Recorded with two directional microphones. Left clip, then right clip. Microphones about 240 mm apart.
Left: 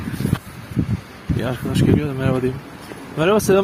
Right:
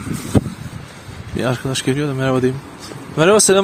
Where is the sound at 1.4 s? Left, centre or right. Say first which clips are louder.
Right 3 dB; right.